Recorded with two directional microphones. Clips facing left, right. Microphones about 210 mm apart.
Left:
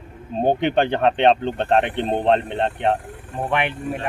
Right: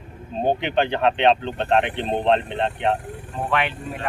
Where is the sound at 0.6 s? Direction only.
45° left (ahead or behind).